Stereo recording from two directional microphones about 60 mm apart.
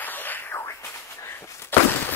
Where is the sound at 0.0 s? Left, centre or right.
Left.